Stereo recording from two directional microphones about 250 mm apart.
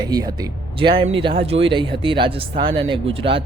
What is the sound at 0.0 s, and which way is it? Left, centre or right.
Speech, centre.